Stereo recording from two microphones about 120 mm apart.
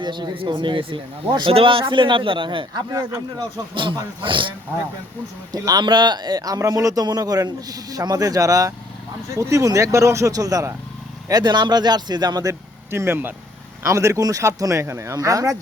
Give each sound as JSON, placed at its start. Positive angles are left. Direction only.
{"t": 0.0, "sound": "speech", "side_deg": -35}
{"t": 2.9, "sound": "a man's voice", "side_deg": -30}
{"t": 5.5, "sound": "a man's voice", "side_deg": -30}